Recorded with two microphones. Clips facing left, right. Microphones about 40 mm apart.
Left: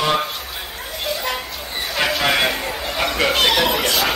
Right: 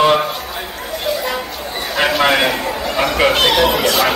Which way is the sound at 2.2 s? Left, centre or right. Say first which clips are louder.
Right 5 dB; centre.